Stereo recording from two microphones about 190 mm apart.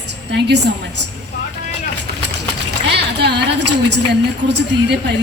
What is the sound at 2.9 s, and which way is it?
A woman's voice, 60° right (ahead or behind).